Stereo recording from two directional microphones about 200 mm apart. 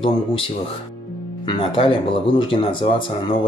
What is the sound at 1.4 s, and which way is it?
Speech, 25° left (ahead or behind).